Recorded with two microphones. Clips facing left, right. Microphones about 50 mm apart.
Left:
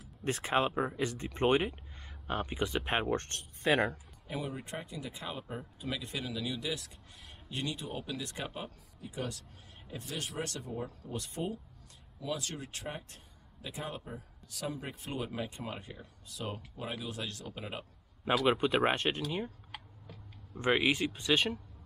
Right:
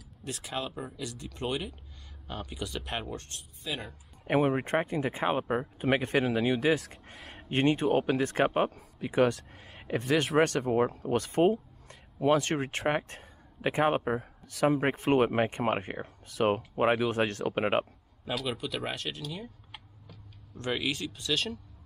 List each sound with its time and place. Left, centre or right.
0.2 s speech: left
4.3 s a man's voice: right
7.2 s a sound: right
7.4 s a man's voice: right
18.5 s speech: left
20.1 s speech: centre